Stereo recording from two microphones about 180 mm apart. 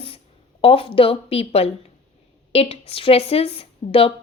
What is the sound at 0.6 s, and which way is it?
A woman's voice, 30° left (ahead or behind).